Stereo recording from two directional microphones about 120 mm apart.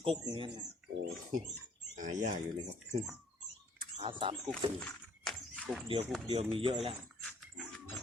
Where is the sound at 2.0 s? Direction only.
90° right.